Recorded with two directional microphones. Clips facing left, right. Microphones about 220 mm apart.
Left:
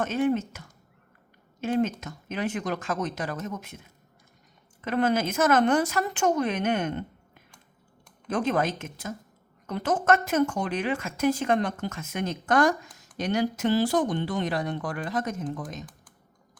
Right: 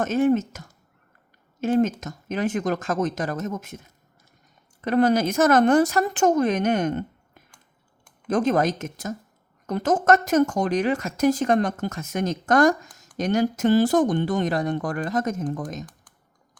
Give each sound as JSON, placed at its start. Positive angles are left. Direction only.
{"t": 0.0, "sound": "speech", "side_deg": -45}